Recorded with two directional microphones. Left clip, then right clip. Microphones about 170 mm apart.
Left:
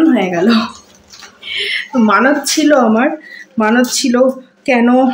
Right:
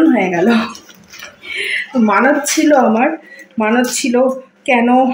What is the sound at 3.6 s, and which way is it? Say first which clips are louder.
Speech: left 2 dB; 15° left (ahead or behind).